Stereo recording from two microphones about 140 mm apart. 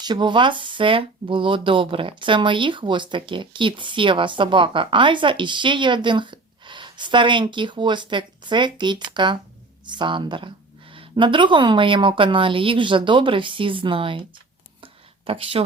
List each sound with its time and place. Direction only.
0.0 s speech: 30° right (ahead or behind)
15.3 s speech: 40° right (ahead or behind)